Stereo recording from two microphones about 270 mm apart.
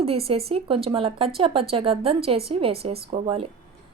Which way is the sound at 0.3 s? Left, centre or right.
Right.